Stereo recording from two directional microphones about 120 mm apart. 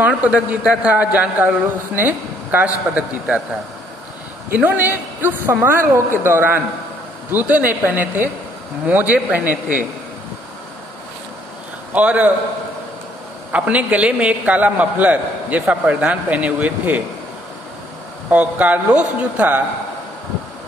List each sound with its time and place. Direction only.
0.0 s a man's voice: 10° right (ahead or behind)
4.5 s a man's voice: 15° right (ahead or behind)
11.9 s a man's voice: 10° right (ahead or behind)
13.5 s a man's voice: 10° right (ahead or behind)
18.3 s a man's voice: 15° right (ahead or behind)